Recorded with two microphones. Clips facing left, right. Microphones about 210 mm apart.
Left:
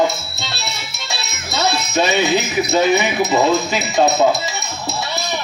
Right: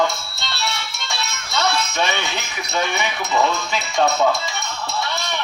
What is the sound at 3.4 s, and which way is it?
Speech, 40° left (ahead or behind).